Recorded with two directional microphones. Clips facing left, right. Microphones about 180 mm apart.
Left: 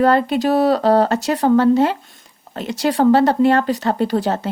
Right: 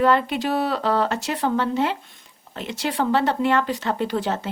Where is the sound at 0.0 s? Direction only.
40° left (ahead or behind).